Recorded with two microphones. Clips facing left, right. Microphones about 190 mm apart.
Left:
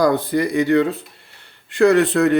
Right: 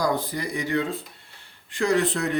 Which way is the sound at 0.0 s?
60° left (ahead or behind).